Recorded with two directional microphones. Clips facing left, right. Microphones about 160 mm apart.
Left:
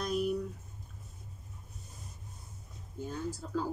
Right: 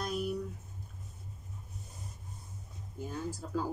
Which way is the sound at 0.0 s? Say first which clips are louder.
Left 3 dB; centre (ahead or behind).